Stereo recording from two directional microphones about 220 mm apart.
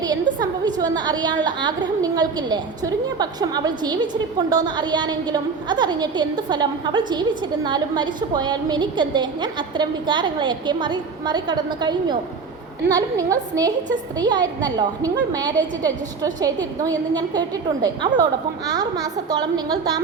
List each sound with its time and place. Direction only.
0.6 s a woman's voice: 20° right (ahead or behind)